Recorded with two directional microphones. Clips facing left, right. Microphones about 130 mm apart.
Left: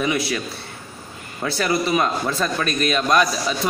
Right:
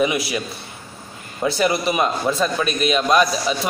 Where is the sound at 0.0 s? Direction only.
15° right (ahead or behind).